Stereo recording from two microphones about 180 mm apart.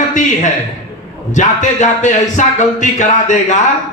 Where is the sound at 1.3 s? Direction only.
45° left (ahead or behind).